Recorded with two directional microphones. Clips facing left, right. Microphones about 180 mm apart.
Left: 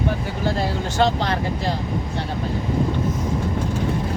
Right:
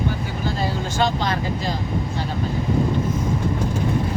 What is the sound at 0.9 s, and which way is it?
Speech, 70° left (ahead or behind).